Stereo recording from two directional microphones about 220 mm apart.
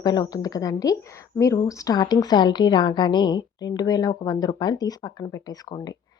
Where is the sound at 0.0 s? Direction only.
20° left (ahead or behind).